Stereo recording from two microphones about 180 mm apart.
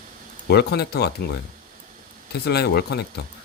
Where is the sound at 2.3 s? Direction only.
65° left (ahead or behind).